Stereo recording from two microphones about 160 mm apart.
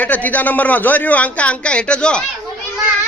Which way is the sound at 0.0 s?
10° left (ahead or behind).